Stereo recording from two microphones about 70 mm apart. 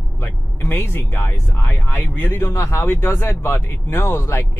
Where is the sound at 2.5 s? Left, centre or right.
Left.